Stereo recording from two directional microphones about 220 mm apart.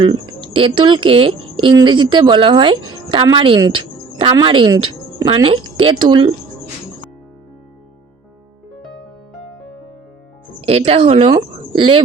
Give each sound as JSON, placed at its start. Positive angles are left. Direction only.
{"t": 0.0, "sound": "a woman's voice", "side_deg": -20}
{"t": 10.7, "sound": "a woman's voice", "side_deg": -25}